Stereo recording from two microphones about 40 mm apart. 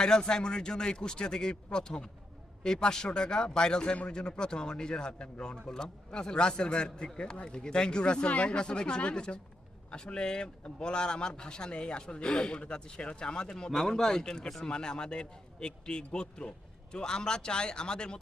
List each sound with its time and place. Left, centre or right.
0.0 s speech: centre